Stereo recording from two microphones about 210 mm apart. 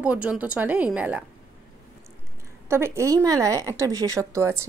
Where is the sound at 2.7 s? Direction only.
10° right (ahead or behind).